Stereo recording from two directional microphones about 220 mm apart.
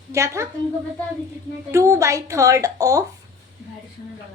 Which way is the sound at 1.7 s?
15° right (ahead or behind).